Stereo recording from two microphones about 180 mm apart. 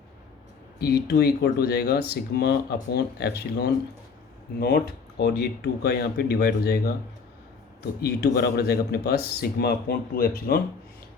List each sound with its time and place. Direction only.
0.8 s speech: 60° left (ahead or behind)
8.4 s speech: 65° left (ahead or behind)